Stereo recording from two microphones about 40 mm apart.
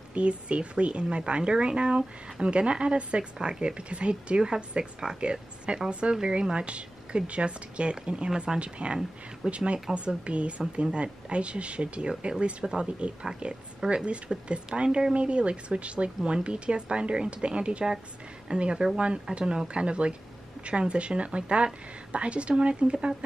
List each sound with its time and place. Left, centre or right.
0.1 s a woman's voice: right